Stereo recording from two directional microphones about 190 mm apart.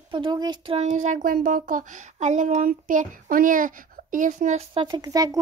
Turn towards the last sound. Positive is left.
turn(degrees=-20)  # may be behind; listen again after turning